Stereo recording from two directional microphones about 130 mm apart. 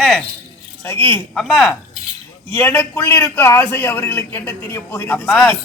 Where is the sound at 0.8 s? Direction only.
15° left (ahead or behind).